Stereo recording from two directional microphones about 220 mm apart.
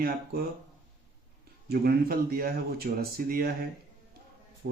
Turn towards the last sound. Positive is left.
turn(degrees=-45)  # may be behind; listen again after turning